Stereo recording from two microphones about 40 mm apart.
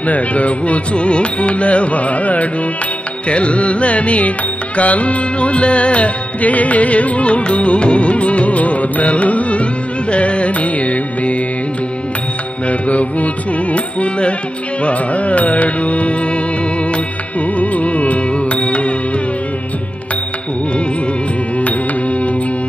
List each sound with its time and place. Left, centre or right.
0.0 s music: left
12.6 s music: left
17.6 s music: left